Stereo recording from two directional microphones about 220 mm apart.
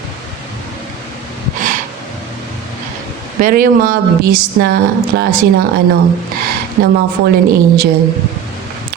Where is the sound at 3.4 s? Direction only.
40° right (ahead or behind).